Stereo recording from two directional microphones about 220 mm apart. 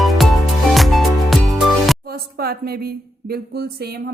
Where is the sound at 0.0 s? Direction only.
Centre (ahead or behind).